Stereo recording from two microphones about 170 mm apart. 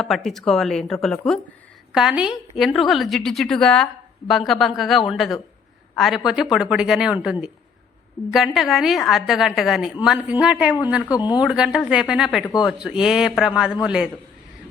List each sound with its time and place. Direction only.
0.0 s a woman's voice: centre (ahead or behind)
8.5 s a woman's voice: centre (ahead or behind)
11.1 s speech: 25° left (ahead or behind)
11.4 s a woman's voice: 5° right (ahead or behind)